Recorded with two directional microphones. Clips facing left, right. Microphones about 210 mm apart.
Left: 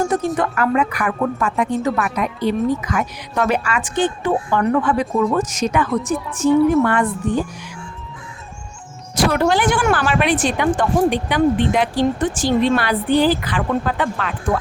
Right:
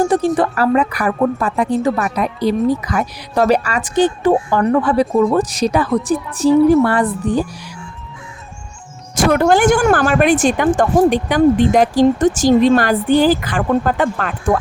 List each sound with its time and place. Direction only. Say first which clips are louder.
0.3 s speech: right 4 dB; 35° right (ahead or behind)
9.1 s speech: right 4 dB; 50° right (ahead or behind)